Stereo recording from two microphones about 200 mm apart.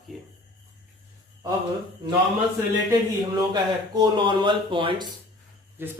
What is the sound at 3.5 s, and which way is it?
Speech, 20° right (ahead or behind).